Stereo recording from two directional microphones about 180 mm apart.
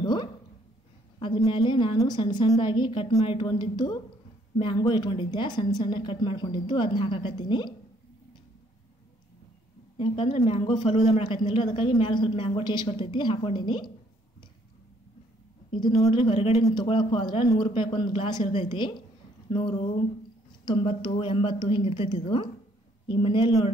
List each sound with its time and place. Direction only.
0.0 s a sound: 25° left (ahead or behind)
1.2 s a woman's voice: 25° left (ahead or behind)
9.9 s a woman's voice: 30° left (ahead or behind)
16.1 s a woman's voice: 30° left (ahead or behind)